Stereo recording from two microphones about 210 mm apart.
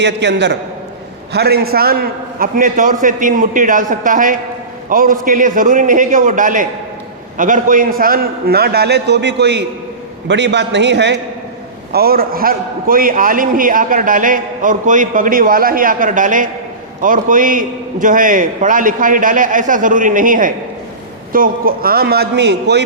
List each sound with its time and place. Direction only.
0.0 s a man's voice: 55° right (ahead or behind)